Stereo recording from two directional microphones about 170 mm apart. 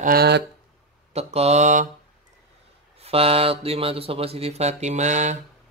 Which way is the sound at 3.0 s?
35° right (ahead or behind).